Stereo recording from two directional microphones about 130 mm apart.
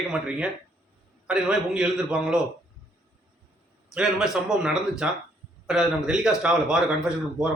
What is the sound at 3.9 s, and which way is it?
A man's voice, 5° right (ahead or behind).